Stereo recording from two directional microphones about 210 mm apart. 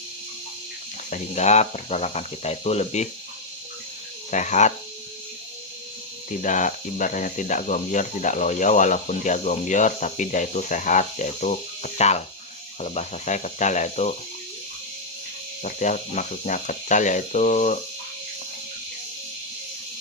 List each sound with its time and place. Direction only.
1.1 s speech: 35° left (ahead or behind)
4.3 s speech: 35° left (ahead or behind)
6.4 s speech: 35° left (ahead or behind)
15.6 s speech: 35° left (ahead or behind)